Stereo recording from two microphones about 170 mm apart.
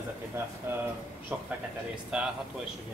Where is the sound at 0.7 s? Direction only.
15° right (ahead or behind).